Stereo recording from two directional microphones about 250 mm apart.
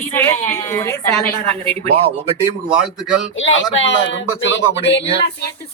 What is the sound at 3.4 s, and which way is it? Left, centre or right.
Speech, left.